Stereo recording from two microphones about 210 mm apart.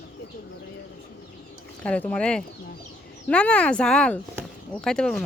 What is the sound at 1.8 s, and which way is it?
Speech, 5° left (ahead or behind).